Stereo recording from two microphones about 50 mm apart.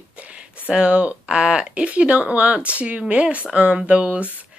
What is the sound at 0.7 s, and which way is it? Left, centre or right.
Speech, right.